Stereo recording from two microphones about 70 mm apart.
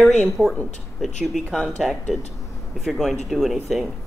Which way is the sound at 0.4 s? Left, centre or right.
Right.